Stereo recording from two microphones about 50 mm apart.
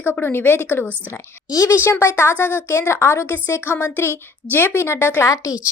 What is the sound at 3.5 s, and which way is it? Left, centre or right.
Speech, left.